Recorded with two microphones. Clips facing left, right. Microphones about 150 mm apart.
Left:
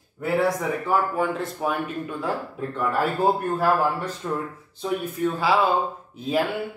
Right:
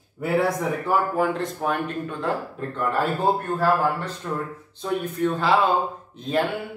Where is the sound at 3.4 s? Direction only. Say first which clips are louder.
Even; 10° left (ahead or behind).